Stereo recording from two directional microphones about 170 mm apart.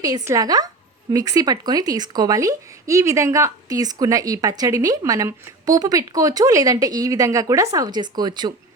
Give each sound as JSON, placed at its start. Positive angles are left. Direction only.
{"t": 0.0, "sound": "speech", "side_deg": -20}